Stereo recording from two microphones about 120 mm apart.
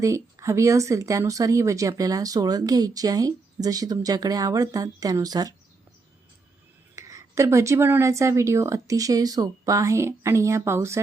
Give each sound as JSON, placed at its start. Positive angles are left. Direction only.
{"t": 0.0, "sound": "speech", "side_deg": -25}
{"t": 6.9, "sound": "speech", "side_deg": -25}